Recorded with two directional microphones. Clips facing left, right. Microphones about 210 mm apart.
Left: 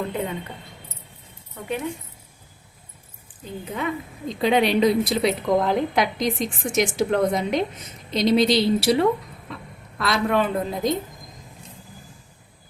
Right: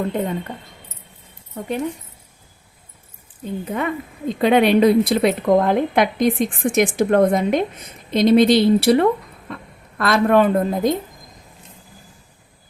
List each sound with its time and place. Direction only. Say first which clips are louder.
0.1 s speech: right 5 dB; 45° right (ahead or behind)
3.7 s speech: right 2 dB; 55° right (ahead or behind)
9.5 s a sound: right 4 dB; 50° right (ahead or behind)
10.0 s speech: right 6 dB; 50° right (ahead or behind)